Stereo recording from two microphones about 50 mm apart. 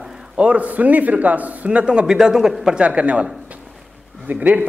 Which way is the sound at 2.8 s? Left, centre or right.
Right.